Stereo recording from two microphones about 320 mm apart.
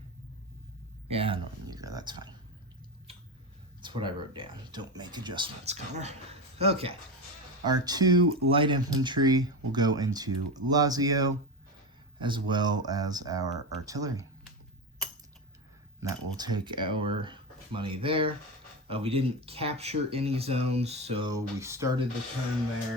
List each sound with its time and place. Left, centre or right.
1.1 s speech: centre
3.8 s speech: centre
16.0 s speech: centre